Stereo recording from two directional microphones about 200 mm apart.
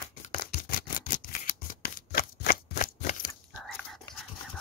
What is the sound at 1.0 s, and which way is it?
Scissors, 40° left (ahead or behind).